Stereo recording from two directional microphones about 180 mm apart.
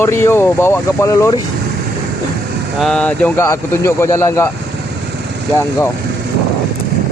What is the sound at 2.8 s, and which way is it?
Speech, 5° left (ahead or behind).